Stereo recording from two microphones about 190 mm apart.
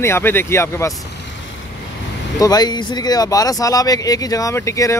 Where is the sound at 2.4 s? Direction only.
20° left (ahead or behind).